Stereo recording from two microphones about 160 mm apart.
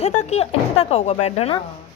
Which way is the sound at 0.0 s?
45° left (ahead or behind).